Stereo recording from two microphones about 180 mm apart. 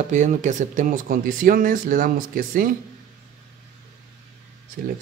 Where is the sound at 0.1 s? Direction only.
40° right (ahead or behind).